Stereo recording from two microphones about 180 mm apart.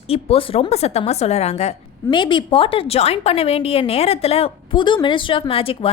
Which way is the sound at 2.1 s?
25° left (ahead or behind).